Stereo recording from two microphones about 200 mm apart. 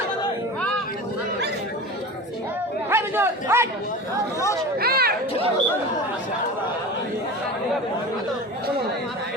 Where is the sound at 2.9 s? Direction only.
10° right (ahead or behind).